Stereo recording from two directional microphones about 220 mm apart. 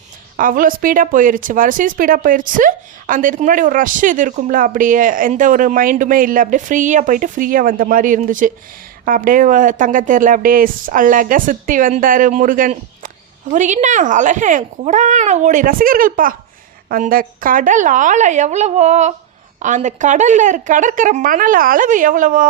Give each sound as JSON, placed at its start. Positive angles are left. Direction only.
{"t": 0.3, "sound": "speech", "side_deg": -40}